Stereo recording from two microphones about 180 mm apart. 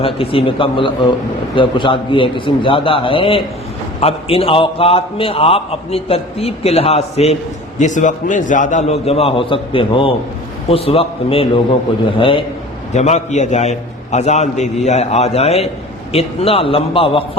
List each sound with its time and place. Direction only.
0.0 s a man's voice: 30° left (ahead or behind)
12.9 s a man's voice: 40° left (ahead or behind)